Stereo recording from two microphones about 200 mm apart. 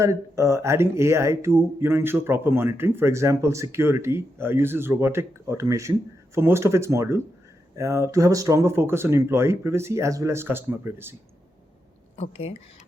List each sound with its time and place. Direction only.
0.0 s speech: 15° right (ahead or behind)
12.1 s speech: 30° left (ahead or behind)